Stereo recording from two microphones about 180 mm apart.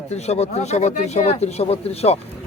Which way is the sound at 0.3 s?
40° left (ahead or behind).